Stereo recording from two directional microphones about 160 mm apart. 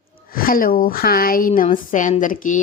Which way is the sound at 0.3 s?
65° left (ahead or behind).